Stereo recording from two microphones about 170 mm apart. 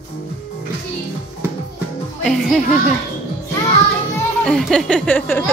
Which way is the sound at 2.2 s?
Centre (ahead or behind).